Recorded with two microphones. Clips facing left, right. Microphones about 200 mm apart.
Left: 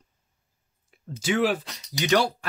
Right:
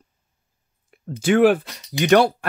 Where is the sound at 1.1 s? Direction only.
55° right (ahead or behind).